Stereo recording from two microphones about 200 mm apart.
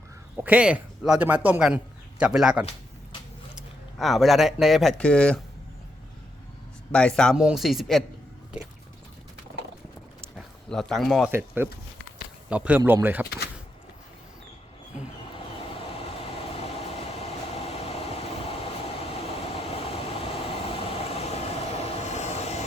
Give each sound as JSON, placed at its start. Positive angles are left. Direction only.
{"t": 0.3, "sound": "speech", "side_deg": -10}
{"t": 6.9, "sound": "speech", "side_deg": 5}
{"t": 10.3, "sound": "speech", "side_deg": 0}
{"t": 11.3, "sound": "a man's voice", "side_deg": -10}
{"t": 15.5, "sound": "train", "side_deg": 30}